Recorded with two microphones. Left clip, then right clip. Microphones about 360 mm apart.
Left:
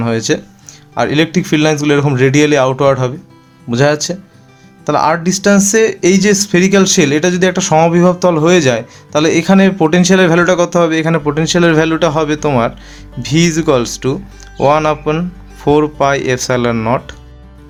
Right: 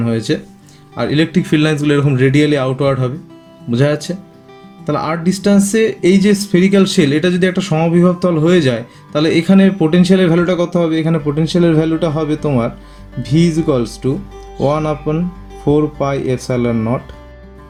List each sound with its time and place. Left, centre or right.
0.0 s speech: centre
16.7 s speech: left